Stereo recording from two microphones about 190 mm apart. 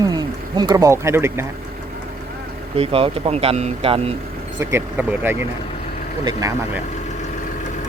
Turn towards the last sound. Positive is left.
turn(degrees=-15)  # may be behind; listen again after turning